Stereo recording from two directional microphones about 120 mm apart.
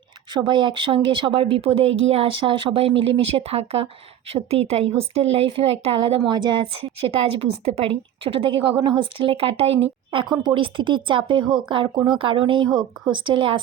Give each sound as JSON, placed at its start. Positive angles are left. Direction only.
{"t": 0.3, "sound": "a woman's voice", "side_deg": -40}
{"t": 7.3, "sound": "a woman's voice", "side_deg": -60}